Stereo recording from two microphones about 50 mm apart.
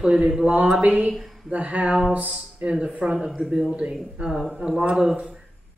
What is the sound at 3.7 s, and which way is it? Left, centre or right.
Speech, right.